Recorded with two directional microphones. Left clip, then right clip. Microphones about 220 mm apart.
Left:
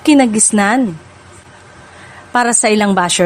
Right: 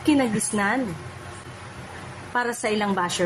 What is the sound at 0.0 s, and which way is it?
Speech, 50° left (ahead or behind).